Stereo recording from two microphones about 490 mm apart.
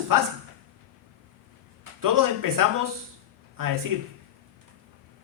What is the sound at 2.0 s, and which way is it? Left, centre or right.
Speech, right.